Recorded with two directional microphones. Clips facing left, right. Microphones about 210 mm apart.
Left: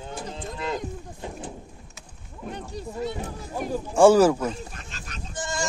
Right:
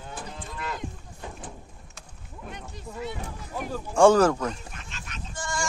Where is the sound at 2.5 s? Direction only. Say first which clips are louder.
Left 6 dB; 35° left (ahead or behind).